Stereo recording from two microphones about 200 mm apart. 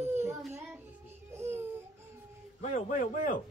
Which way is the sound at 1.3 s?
10° right (ahead or behind).